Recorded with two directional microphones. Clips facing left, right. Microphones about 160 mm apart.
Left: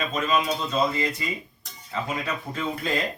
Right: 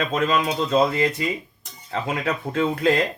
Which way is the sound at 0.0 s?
85° right.